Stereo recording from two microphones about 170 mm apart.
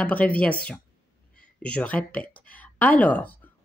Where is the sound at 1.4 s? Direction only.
5° left (ahead or behind).